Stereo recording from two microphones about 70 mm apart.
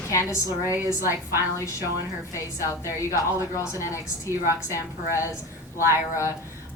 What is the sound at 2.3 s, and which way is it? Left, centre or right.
Speech, left.